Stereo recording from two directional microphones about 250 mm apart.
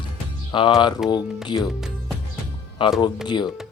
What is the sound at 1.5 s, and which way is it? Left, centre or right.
Speech, centre.